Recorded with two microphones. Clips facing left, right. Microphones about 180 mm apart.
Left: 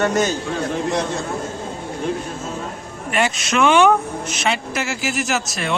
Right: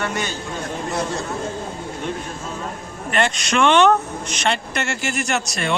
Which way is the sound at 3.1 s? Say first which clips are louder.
Even; 5° left (ahead or behind).